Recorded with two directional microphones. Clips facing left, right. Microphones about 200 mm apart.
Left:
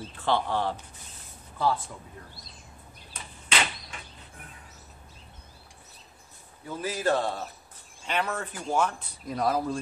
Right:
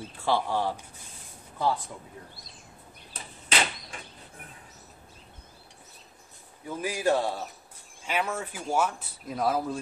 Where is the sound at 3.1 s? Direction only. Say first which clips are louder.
Right 1 dB; 30° right (ahead or behind).